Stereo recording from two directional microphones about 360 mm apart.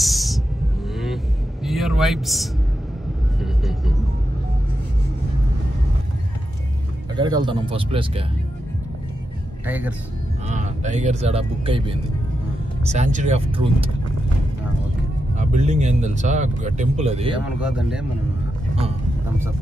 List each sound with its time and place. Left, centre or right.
0.0 s a sound: centre
1.0 s vehicle: centre
7.2 s speech: centre
9.7 s speech: centre
10.5 s speech: centre
15.3 s speech: centre
17.6 s speech: centre